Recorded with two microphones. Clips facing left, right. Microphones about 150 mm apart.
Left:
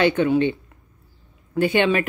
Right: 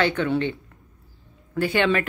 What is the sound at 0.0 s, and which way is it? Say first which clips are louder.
Speech: left 4 dB; 20° left (ahead or behind).